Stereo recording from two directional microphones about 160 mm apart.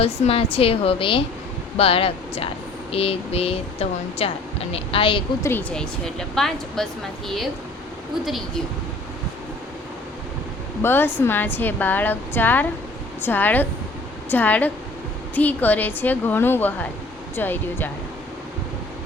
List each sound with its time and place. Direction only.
0.0 s speech: 35° left (ahead or behind)
5.4 s speech: 15° left (ahead or behind)
8.2 s speech: centre (ahead or behind)
10.8 s speech: 15° left (ahead or behind)